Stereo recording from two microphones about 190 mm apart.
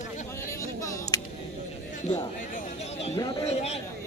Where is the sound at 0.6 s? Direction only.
15° left (ahead or behind).